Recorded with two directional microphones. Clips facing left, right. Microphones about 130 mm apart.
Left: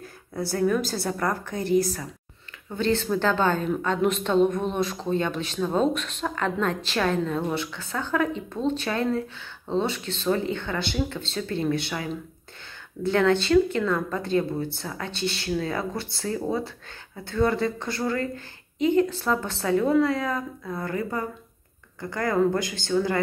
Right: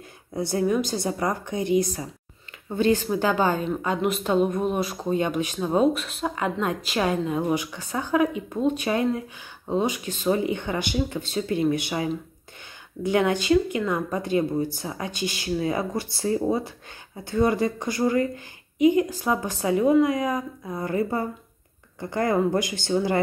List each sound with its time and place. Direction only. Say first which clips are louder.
0.3 s speech: even; 20° right (ahead or behind)